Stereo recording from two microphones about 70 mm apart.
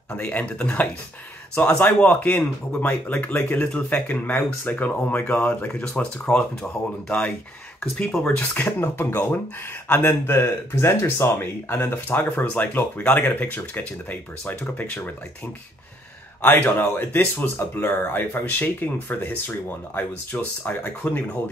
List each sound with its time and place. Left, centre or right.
0.1 s speech: left
16.4 s speech: left